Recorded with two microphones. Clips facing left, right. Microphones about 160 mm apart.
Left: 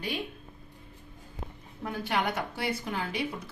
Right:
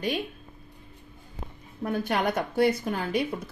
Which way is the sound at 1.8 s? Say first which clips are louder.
Right 4 dB; 45° right (ahead or behind).